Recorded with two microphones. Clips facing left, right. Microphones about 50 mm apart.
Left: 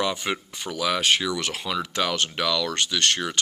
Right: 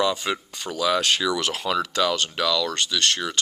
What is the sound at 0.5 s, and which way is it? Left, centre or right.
Speech, centre.